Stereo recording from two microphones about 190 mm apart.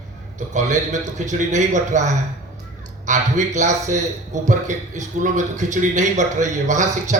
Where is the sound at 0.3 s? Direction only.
40° right (ahead or behind).